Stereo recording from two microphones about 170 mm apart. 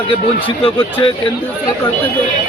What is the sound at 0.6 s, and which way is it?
Speech, 30° left (ahead or behind).